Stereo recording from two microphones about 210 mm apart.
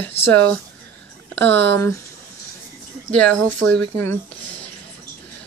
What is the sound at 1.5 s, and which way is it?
Speech, 55° right (ahead or behind).